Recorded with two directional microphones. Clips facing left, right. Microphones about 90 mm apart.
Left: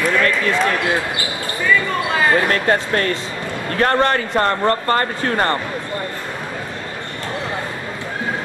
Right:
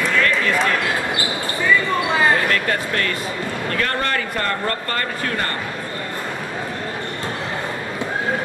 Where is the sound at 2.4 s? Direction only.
30° left (ahead or behind).